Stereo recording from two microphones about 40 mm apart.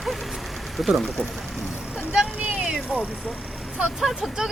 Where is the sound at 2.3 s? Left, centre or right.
Right.